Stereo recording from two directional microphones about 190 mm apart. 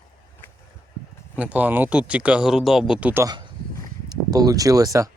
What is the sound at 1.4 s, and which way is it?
Speech, 5° right (ahead or behind).